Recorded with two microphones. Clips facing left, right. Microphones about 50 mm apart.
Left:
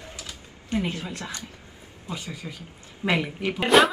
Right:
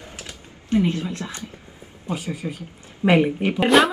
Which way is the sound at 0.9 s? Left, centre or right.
Right.